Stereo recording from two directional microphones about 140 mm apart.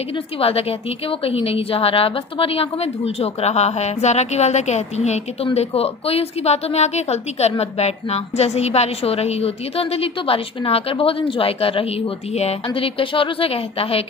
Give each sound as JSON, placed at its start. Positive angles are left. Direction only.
{"t": 0.4, "sound": "a woman's voice", "side_deg": 45}